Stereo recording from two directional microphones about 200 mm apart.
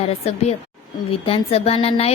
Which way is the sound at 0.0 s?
30° left (ahead or behind).